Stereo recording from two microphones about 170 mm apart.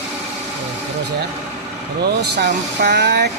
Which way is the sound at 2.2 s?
85° right.